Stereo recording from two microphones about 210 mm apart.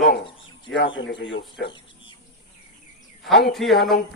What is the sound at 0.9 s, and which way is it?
Speech, 60° left (ahead or behind).